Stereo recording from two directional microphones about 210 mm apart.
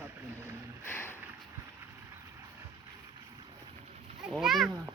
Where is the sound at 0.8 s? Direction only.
10° left (ahead or behind).